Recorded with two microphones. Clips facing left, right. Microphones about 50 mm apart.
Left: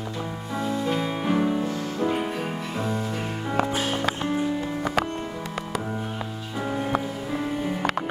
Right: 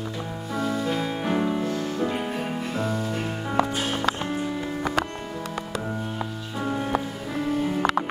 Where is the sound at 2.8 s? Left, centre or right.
Left.